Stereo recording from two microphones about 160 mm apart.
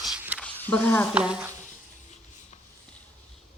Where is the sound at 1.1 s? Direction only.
5° right (ahead or behind).